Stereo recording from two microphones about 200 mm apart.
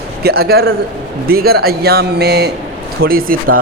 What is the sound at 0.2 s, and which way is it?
Speech, 50° right (ahead or behind).